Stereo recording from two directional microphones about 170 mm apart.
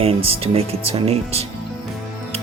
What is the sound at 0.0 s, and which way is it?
Speech, 35° right (ahead or behind).